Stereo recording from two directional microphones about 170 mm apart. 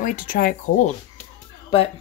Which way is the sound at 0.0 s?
55° left (ahead or behind).